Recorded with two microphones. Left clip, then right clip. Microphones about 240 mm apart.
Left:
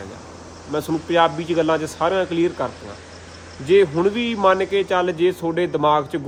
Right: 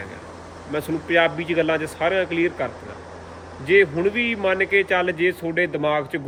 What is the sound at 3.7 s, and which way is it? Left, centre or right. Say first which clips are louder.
A man's voice: left 1 dB; centre.